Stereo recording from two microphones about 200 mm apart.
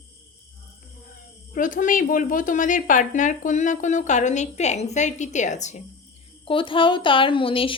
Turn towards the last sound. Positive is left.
turn(degrees=25)  # may be behind; listen again after turning